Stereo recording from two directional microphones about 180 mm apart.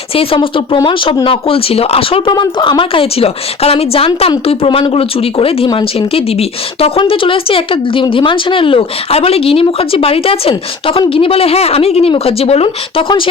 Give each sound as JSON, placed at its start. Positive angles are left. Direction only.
{"t": 0.1, "sound": "speech", "side_deg": 30}